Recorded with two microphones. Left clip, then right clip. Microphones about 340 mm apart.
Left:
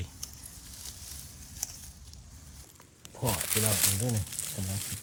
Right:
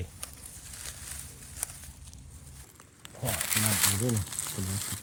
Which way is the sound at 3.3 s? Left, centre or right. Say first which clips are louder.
Right 3 dB; centre.